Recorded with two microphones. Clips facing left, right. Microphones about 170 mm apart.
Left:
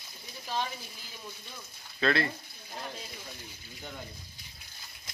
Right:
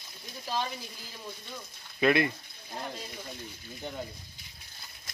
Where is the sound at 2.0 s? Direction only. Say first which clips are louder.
Right 3 dB; 15° right (ahead or behind).